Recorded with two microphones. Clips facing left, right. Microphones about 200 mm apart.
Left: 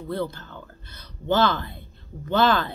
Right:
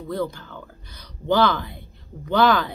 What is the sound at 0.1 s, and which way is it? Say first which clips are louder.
Speech: right 2 dB; 15° right (ahead or behind).